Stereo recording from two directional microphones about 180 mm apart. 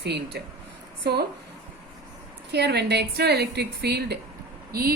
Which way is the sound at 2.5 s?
65° right (ahead or behind).